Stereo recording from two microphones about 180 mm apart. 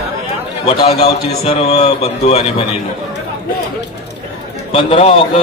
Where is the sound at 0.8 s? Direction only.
35° left (ahead or behind).